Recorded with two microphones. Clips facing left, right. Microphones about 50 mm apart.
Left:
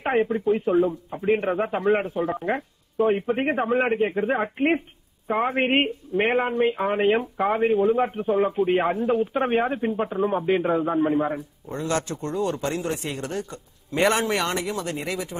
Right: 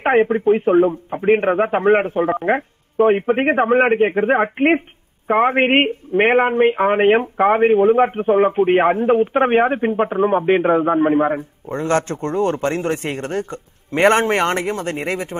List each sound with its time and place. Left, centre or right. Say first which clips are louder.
0.0 s speech: right 7 dB; right